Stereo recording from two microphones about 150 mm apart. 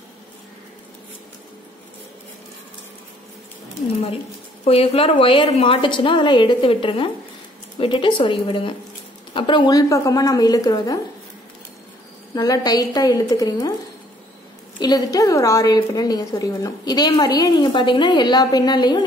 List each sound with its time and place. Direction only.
4.6 s a woman's voice: 40° left (ahead or behind); by 11.0 s 25° left (ahead or behind)
12.4 s a woman's voice: 25° left (ahead or behind)
14.8 s a woman's voice: 25° left (ahead or behind)